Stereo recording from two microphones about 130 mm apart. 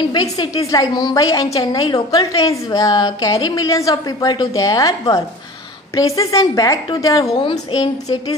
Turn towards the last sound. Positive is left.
turn(degrees=40)  # may be behind; listen again after turning